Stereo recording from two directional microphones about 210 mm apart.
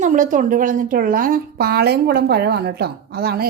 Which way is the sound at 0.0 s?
35° right (ahead or behind).